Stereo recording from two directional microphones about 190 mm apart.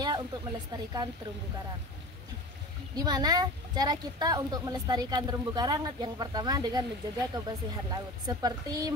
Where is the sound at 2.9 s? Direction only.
20° right (ahead or behind).